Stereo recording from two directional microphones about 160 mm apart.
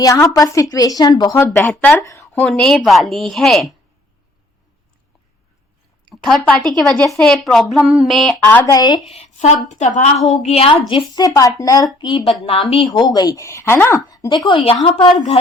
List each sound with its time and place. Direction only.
0.0 s speech: 20° left (ahead or behind)
1.5 s a woman's voice: 5° left (ahead or behind)
2.0 s a woman's voice: 20° left (ahead or behind); by 3.8 s centre (ahead or behind)
6.1 s a woman's voice: 5° left (ahead or behind)
8.4 s speech: 15° left (ahead or behind)
9.1 s a woman's voice: 45° left (ahead or behind)
12.9 s speech: 25° left (ahead or behind)